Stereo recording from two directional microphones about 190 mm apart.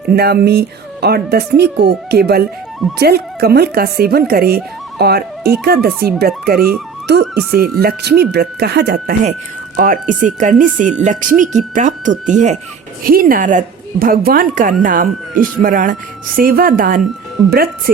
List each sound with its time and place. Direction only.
0.1 s speech: 55° right (ahead or behind)
9.7 s a woman's voice: 45° right (ahead or behind)
13.1 s a woman's voice: 50° right (ahead or behind)